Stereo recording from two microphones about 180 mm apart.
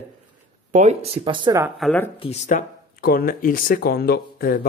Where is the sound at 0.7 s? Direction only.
40° right (ahead or behind).